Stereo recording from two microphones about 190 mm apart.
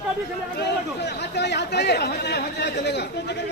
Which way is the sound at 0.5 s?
60° left (ahead or behind).